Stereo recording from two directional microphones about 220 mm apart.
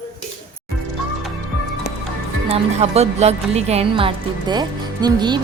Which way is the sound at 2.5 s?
30° right (ahead or behind).